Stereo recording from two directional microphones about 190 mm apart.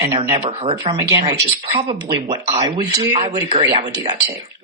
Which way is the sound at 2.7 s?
35° right (ahead or behind).